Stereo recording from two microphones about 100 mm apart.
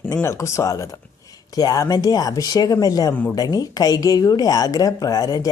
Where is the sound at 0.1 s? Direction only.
30° left (ahead or behind).